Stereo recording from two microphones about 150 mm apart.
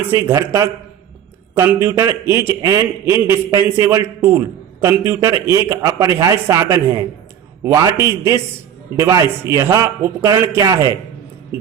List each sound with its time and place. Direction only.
0.0 s a man's voice: 20° right (ahead or behind)